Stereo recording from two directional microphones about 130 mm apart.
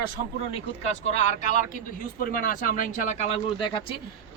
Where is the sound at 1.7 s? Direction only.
90° left; by 3.2 s 75° left (ahead or behind).